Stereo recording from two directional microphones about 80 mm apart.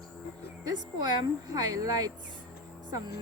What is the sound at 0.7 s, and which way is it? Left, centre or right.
A woman's voice, right.